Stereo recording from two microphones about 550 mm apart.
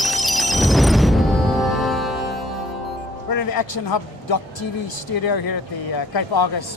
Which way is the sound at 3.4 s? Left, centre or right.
Left.